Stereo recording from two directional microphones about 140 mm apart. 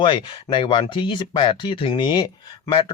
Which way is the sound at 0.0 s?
35° left (ahead or behind).